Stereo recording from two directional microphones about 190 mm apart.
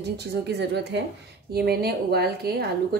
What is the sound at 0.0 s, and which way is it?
A woman's voice, 60° right (ahead or behind).